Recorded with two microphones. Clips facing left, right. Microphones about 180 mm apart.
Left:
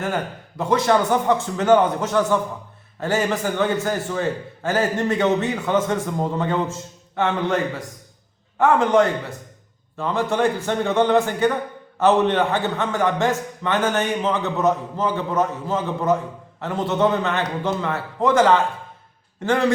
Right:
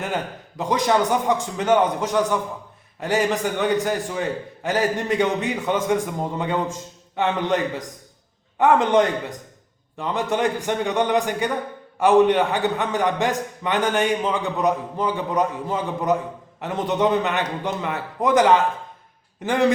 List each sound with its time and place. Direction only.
0.0 s a man's voice: 15° right (ahead or behind)